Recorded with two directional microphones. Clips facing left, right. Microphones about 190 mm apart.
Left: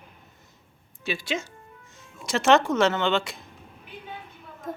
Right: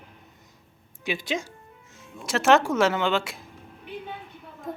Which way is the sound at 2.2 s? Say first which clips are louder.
Even; 5° right (ahead or behind).